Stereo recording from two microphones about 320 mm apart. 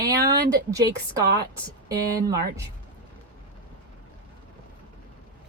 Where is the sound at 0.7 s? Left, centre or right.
Centre.